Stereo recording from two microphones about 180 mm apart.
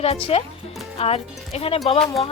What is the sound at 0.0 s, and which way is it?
Speech, 35° left (ahead or behind).